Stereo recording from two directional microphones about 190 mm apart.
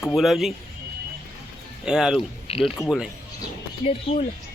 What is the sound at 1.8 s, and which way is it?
Speech, 5° right (ahead or behind).